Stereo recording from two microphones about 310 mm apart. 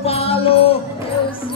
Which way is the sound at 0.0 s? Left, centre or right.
Centre.